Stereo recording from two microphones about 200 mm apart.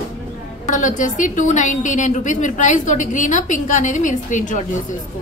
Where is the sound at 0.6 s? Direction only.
40° left (ahead or behind).